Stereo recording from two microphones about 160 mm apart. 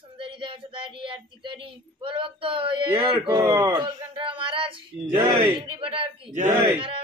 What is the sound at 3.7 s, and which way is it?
Speech, 30° right (ahead or behind).